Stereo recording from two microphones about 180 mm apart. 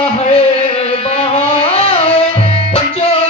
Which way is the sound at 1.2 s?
35° left (ahead or behind).